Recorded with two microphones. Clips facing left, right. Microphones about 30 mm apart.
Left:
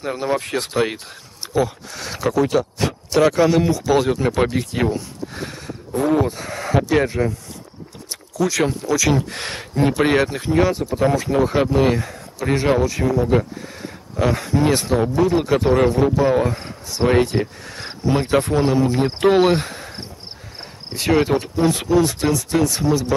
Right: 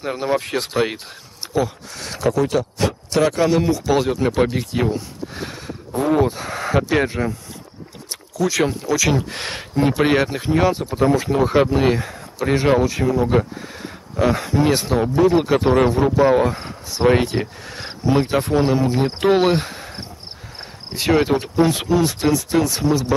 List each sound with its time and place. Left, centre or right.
0.0 s speech: centre
8.4 s speech: centre